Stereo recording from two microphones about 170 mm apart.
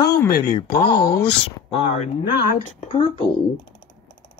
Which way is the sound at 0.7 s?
65° left (ahead or behind).